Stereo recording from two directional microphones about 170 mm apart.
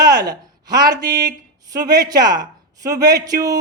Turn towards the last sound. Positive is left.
turn(degrees=-20)  # may be behind; listen again after turning